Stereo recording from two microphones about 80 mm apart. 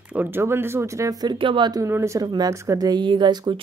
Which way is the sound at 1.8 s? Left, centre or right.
Right.